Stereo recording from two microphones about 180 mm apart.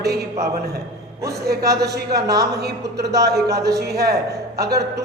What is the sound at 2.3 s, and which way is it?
Speech, 20° right (ahead or behind).